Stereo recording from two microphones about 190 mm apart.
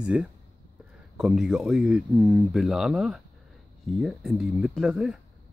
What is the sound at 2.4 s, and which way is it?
Speech, centre (ahead or behind).